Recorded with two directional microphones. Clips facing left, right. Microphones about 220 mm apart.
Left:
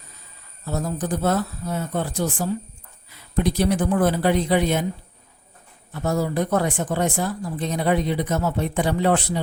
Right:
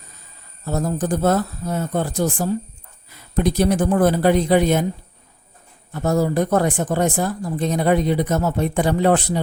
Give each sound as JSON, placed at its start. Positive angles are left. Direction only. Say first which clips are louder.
{"t": 0.6, "sound": "speech", "louder": "right 4 dB", "side_deg": -45}
{"t": 5.9, "sound": "speech", "louder": "right 4 dB", "side_deg": -45}